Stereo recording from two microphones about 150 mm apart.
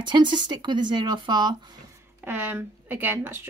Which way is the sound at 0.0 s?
30° right (ahead or behind).